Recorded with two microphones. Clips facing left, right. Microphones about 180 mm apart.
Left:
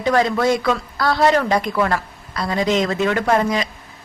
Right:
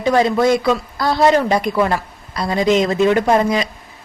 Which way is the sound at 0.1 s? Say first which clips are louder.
Right 3 dB; 15° right (ahead or behind).